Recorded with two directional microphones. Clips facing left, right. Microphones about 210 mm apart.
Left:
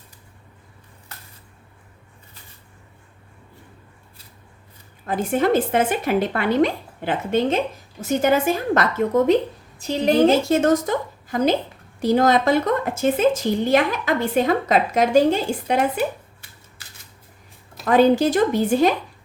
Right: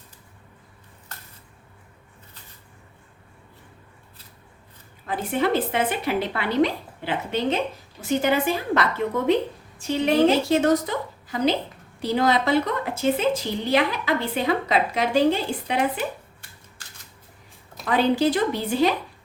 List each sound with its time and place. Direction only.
5.0 s a woman's voice: 45° left (ahead or behind)
17.8 s a woman's voice: 45° left (ahead or behind)